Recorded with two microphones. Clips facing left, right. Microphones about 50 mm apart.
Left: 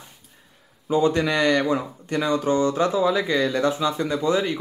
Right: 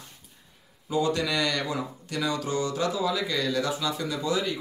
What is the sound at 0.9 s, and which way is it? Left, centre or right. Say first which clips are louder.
Speech: left 6 dB; left.